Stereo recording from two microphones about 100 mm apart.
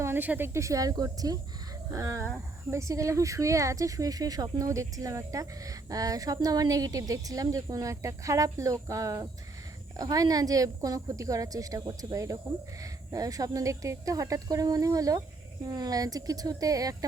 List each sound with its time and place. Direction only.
0.0 s speech: 20° right (ahead or behind); by 17.1 s 35° right (ahead or behind)